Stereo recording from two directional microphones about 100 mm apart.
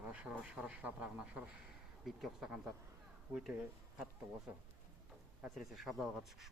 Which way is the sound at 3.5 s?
15° right (ahead or behind).